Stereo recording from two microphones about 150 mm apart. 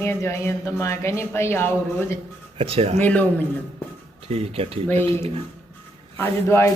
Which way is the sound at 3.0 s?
10° left (ahead or behind).